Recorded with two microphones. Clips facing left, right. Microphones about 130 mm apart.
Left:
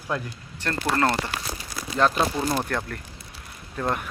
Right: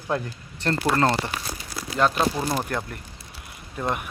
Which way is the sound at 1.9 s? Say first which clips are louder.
Even; 5° right (ahead or behind).